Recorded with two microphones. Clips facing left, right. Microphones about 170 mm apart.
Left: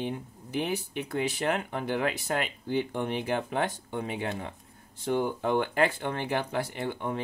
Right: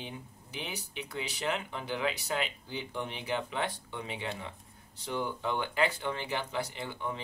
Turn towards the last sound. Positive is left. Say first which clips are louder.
# left 6 dB
turn(degrees=55)  # may be behind; listen again after turning